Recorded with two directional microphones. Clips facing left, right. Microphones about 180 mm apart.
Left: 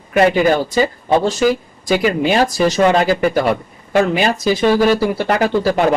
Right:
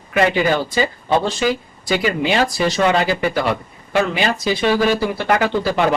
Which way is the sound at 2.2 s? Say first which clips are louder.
Left 3 dB; 45° left (ahead or behind).